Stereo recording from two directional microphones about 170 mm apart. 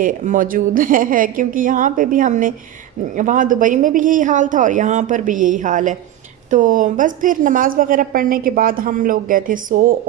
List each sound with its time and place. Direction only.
0.0 s a woman's voice: 50° right (ahead or behind)